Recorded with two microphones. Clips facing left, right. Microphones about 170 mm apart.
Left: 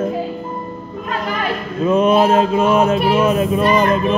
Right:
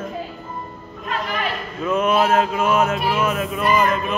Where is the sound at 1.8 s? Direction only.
30° left (ahead or behind).